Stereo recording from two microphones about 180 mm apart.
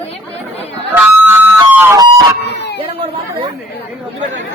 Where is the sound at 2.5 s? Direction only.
70° left (ahead or behind).